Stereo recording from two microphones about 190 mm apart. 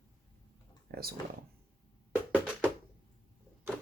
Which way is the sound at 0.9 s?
55° right (ahead or behind).